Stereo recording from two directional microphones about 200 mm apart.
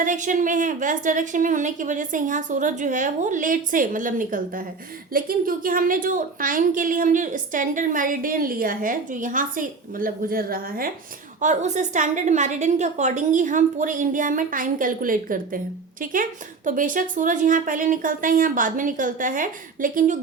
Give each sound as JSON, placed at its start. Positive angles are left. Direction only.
{"t": 0.0, "sound": "a woman's voice", "side_deg": -40}